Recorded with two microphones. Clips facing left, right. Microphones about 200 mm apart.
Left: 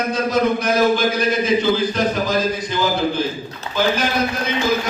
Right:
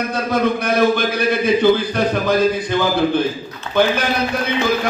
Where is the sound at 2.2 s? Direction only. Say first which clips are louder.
Right 4 dB; 60° right (ahead or behind).